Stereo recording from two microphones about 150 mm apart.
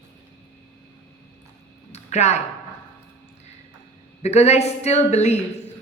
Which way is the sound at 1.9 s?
50° left (ahead or behind).